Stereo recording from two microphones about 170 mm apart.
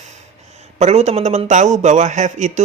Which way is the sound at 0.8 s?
40° right (ahead or behind).